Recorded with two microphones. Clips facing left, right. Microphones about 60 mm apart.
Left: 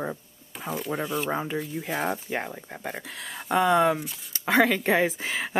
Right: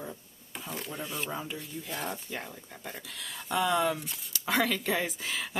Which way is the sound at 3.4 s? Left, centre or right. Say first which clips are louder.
Left 7 dB; left.